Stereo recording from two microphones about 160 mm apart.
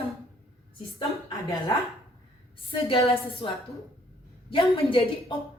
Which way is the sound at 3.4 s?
35° left (ahead or behind).